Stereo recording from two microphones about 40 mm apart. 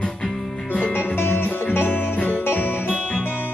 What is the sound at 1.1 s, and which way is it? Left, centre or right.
Music, left.